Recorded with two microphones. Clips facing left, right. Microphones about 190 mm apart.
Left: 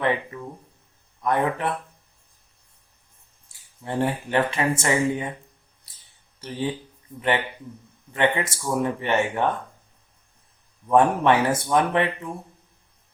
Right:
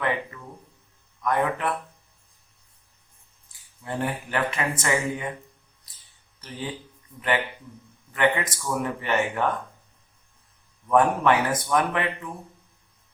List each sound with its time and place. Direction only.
0.0 s speech: 25° left (ahead or behind)
3.8 s speech: 25° left (ahead or behind)
8.1 s speech: 25° left (ahead or behind)
10.8 s speech: 25° left (ahead or behind)